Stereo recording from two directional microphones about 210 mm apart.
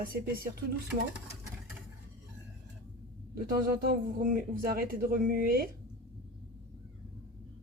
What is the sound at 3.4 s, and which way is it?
Speech, 45° right (ahead or behind).